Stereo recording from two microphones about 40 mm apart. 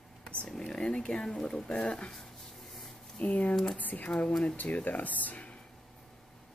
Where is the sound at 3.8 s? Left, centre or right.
Left.